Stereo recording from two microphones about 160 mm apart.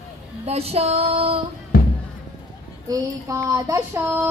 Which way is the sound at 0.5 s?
40° right (ahead or behind).